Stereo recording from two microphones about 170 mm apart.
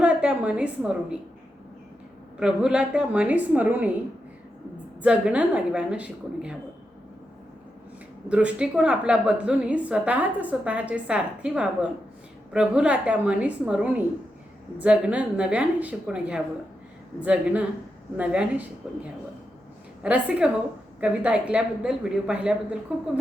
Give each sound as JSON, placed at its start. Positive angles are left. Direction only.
{"t": 0.0, "sound": "a woman's voice", "side_deg": -5}
{"t": 2.4, "sound": "a woman's voice", "side_deg": -5}
{"t": 5.0, "sound": "a woman's voice", "side_deg": -5}
{"t": 8.3, "sound": "a woman's voice", "side_deg": -5}